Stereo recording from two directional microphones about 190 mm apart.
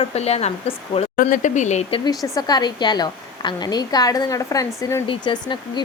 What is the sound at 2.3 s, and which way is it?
A woman's voice, 20° left (ahead or behind).